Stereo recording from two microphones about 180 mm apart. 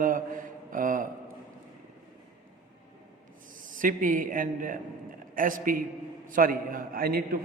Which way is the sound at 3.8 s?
50° right (ahead or behind).